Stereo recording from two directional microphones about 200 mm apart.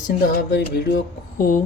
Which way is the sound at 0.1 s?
45° left (ahead or behind).